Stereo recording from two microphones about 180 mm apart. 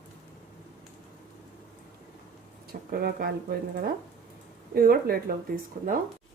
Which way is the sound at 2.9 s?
55° right (ahead or behind).